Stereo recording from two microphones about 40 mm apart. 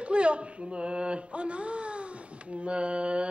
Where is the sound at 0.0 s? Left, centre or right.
Right.